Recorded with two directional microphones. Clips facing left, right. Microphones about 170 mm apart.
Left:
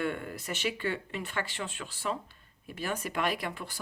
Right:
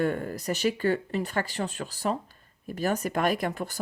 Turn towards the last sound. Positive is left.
turn(degrees=-45)  # may be behind; listen again after turning